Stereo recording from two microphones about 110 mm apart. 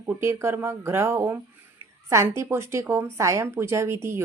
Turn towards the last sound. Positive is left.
turn(degrees=-25)  # may be behind; listen again after turning